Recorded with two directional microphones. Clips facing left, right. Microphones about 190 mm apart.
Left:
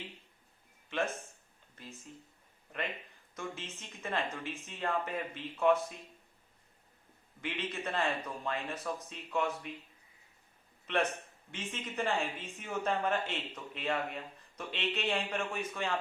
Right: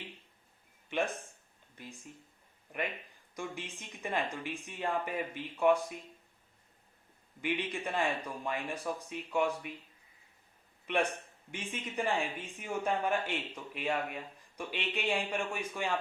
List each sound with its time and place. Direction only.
0.9 s a sound: 15° right (ahead or behind)
1.7 s speech: 15° right (ahead or behind)
3.3 s speech: 15° right (ahead or behind)
7.4 s speech: 15° right (ahead or behind)
11.5 s speech: 15° right (ahead or behind)